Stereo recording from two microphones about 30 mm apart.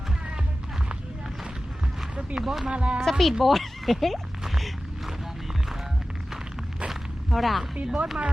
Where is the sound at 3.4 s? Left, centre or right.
Centre.